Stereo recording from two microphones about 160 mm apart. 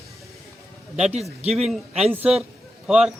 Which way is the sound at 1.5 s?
Centre (ahead or behind).